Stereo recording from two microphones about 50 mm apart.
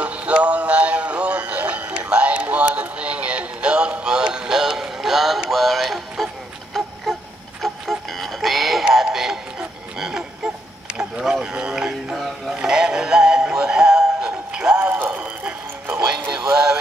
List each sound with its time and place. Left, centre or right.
0.0 s synthetic singing: right; by 5.4 s centre
5.5 s music: centre
8.9 s synthetic singing: centre
9.9 s a sound: centre
11.4 s music: centre
15.1 s a sound: right
16.3 s music: centre